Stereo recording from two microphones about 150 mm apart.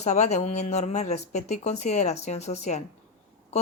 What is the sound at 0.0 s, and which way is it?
Speech, 50° left (ahead or behind).